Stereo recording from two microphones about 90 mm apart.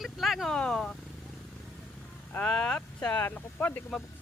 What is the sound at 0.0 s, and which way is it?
Speech, centre (ahead or behind).